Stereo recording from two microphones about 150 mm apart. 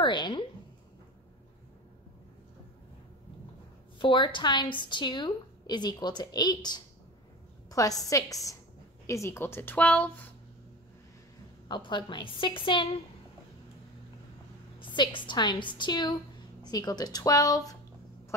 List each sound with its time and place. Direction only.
0.0 s a woman's voice: 30° left (ahead or behind)
4.0 s a woman's voice: 30° left (ahead or behind); by 10.1 s 10° left (ahead or behind)
11.6 s a woman's voice: 30° left (ahead or behind)
14.8 s a woman's voice: 30° left (ahead or behind)